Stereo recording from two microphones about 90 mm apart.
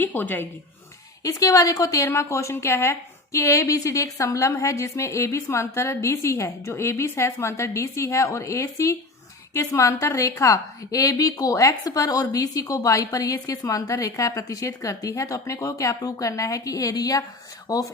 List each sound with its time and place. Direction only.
0.0 s speech: 20° left (ahead or behind)
1.2 s a woman's voice: 40° left (ahead or behind)